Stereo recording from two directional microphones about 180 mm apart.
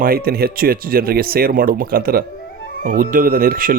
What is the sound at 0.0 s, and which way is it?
Speech, 55° right (ahead or behind).